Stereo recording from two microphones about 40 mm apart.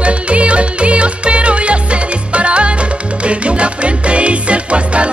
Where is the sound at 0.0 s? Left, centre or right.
Right.